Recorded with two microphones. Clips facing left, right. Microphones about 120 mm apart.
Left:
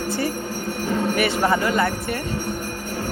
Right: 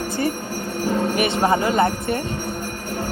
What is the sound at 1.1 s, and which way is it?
Speech, 20° right (ahead or behind).